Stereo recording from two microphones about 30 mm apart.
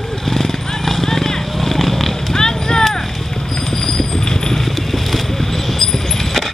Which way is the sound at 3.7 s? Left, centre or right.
Left.